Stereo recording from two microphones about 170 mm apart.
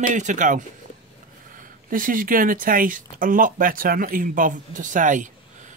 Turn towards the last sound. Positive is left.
turn(degrees=-50)  # may be behind; listen again after turning